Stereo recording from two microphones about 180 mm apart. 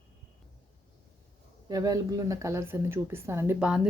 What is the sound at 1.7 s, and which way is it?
A woman's voice, 20° right (ahead or behind).